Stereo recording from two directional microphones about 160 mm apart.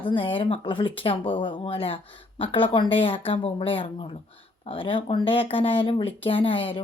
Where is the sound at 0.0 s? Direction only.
35° left (ahead or behind).